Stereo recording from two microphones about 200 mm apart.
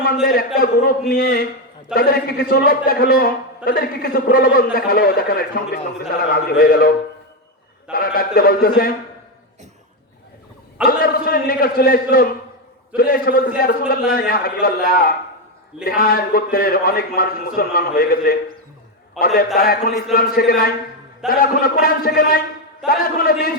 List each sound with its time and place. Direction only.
0.6 s a man's voice: 50° left (ahead or behind)
7.9 s a man's voice: 50° left (ahead or behind)
10.8 s a man's voice: 45° left (ahead or behind)
19.2 s a man's voice: centre (ahead or behind)
19.5 s a man's voice: 45° left (ahead or behind)